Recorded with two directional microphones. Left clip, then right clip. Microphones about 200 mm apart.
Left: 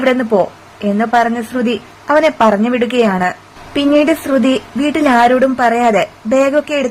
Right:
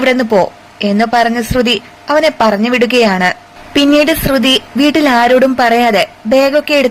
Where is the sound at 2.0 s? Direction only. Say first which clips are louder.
Even; centre (ahead or behind).